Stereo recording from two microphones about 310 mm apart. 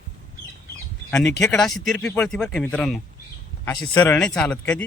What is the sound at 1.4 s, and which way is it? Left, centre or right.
Speech, centre.